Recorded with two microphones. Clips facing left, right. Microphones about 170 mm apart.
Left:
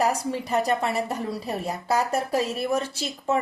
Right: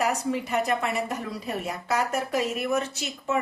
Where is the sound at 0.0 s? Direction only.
35° left (ahead or behind).